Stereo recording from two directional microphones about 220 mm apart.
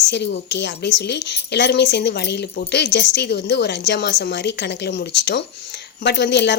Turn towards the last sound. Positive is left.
turn(degrees=50)  # may be behind; listen again after turning